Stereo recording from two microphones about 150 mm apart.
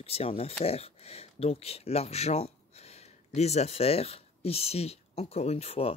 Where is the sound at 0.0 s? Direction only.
40° left (ahead or behind).